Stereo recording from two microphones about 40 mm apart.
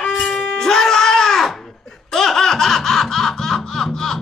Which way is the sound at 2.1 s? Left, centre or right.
Centre.